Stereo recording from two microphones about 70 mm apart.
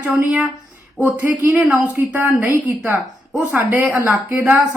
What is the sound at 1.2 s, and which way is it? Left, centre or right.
A woman's voice, right.